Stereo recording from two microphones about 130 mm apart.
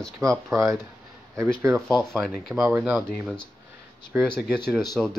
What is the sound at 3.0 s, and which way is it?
Speech, 5° left (ahead or behind).